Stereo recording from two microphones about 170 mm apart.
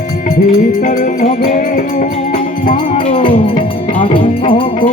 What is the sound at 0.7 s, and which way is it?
Music, 50° left (ahead or behind).